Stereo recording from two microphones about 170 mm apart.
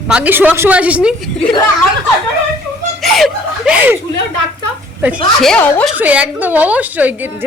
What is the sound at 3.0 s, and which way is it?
Speech, centre (ahead or behind).